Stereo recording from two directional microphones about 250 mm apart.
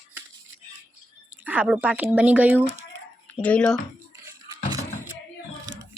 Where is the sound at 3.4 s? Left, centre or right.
Centre.